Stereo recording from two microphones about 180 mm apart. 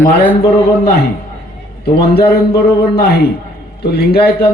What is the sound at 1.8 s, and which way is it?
A man's voice, 65° left (ahead or behind).